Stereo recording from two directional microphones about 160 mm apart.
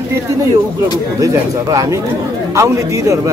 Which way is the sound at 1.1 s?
20° right (ahead or behind).